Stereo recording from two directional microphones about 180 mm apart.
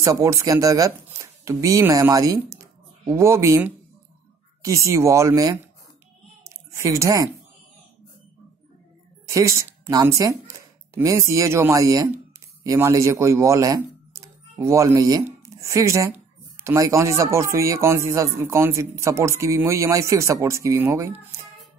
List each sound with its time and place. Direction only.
0.0 s speech: 15° right (ahead or behind)
6.4 s a sound: 15° right (ahead or behind)
9.3 s speech: 15° right (ahead or behind)